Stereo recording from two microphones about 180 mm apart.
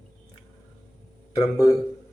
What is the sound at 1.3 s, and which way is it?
Speech, 20° left (ahead or behind).